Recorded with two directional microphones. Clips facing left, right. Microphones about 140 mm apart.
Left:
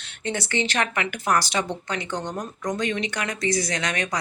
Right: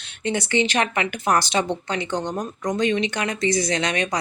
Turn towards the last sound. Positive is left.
turn(degrees=-20)  # may be behind; listen again after turning